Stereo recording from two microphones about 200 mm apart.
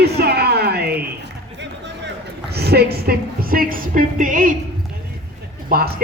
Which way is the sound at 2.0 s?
55° right (ahead or behind).